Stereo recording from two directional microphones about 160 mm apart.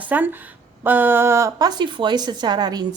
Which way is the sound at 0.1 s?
10° right (ahead or behind).